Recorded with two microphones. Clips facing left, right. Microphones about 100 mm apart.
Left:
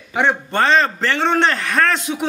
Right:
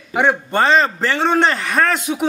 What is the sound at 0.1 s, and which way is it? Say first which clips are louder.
A man's voice: right 2 dB; 5° right (ahead or behind).